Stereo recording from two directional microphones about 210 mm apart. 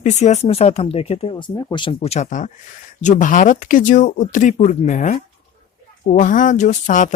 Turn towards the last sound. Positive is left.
turn(degrees=35)  # may be behind; listen again after turning